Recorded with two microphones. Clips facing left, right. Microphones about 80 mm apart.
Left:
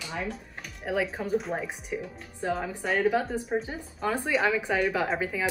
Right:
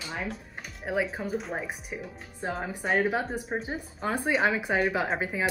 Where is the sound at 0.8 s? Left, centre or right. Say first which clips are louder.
Even; centre.